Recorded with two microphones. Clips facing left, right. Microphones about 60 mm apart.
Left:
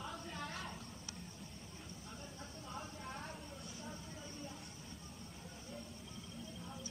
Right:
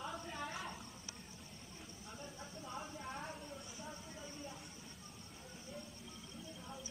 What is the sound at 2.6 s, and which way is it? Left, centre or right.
Vehicle, centre.